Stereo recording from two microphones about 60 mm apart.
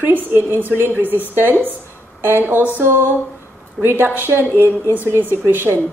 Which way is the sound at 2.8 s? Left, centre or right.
Right.